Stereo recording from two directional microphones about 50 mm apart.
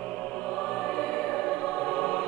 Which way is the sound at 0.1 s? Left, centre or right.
Centre.